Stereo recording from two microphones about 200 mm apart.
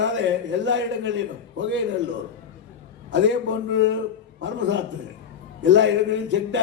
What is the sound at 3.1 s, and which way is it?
A man's voice, 65° right (ahead or behind).